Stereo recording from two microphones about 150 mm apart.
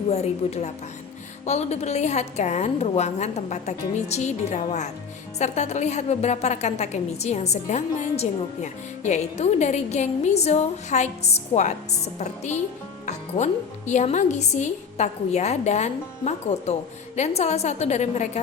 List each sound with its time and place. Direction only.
0.1 s a woman's voice: 45° left (ahead or behind)